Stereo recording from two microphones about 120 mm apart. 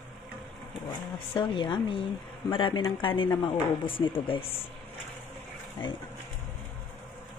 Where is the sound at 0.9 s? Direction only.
45° left (ahead or behind).